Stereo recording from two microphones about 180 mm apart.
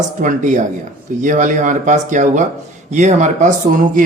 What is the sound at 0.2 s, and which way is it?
Speech, 45° right (ahead or behind).